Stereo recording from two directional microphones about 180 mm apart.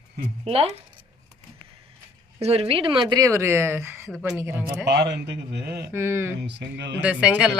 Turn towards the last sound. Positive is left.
turn(degrees=-5)  # may be behind; listen again after turning